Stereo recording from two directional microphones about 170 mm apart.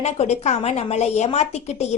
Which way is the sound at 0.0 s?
40° left (ahead or behind).